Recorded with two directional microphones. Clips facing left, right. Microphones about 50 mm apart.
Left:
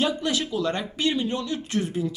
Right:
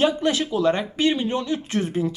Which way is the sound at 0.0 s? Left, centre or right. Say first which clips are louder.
Right 4 dB; right.